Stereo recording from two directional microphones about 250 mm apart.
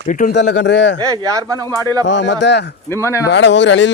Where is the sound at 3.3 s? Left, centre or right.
Left.